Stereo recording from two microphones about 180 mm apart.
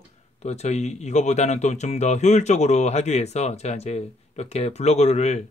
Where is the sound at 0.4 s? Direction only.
35° left (ahead or behind).